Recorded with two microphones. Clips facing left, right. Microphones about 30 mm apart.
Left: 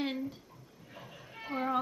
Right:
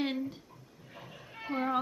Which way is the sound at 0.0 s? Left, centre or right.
Centre.